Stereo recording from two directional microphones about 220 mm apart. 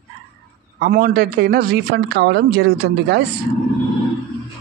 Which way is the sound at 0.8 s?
40° right (ahead or behind).